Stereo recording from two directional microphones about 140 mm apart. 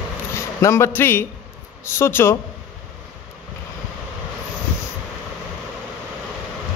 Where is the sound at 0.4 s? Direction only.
20° left (ahead or behind).